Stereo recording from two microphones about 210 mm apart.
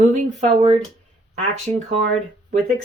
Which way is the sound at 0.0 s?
35° right (ahead or behind).